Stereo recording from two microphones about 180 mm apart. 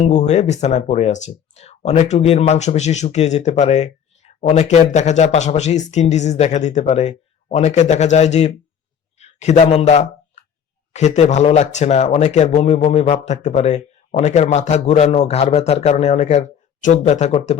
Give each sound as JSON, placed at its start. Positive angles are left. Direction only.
{"t": 0.0, "sound": "speech", "side_deg": 40}
{"t": 9.1, "sound": "a sound", "side_deg": 40}
{"t": 10.9, "sound": "speech", "side_deg": 40}